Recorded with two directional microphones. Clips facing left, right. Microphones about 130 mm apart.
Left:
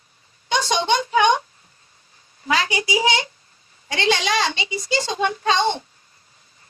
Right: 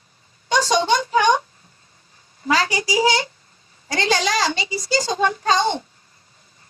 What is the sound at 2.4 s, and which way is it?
A woman's voice, 40° right (ahead or behind).